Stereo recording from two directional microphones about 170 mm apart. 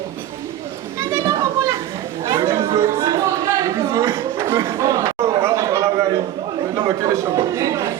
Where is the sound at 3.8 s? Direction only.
15° right (ahead or behind).